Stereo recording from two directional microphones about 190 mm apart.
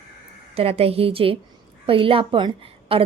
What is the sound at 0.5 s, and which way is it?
A woman's voice, 30° right (ahead or behind).